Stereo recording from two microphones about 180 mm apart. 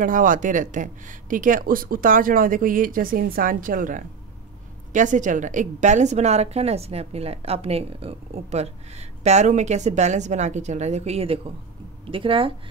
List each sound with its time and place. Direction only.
0.0 s a woman's voice: 50° right (ahead or behind); by 12.5 s 30° right (ahead or behind)